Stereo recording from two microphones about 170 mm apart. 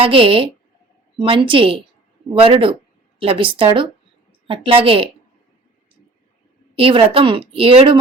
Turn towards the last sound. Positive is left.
turn(degrees=-30)  # may be behind; listen again after turning